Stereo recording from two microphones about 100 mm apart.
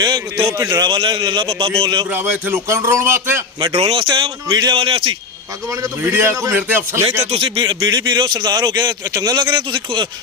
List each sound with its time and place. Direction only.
0.4 s a man's voice: 35° right (ahead or behind)
0.9 s speech: 50° right (ahead or behind)
2.0 s a man's voice: 20° right (ahead or behind)
3.7 s a man's voice: 70° right (ahead or behind)
5.8 s a man's voice: 30° right (ahead or behind)
7.2 s speech: 80° right; by 10.1 s 55° right (ahead or behind)